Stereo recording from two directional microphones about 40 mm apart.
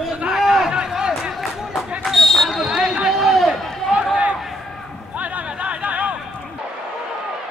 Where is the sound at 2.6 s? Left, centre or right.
Centre.